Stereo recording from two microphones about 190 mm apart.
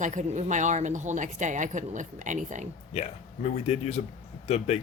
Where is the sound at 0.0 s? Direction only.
40° right (ahead or behind).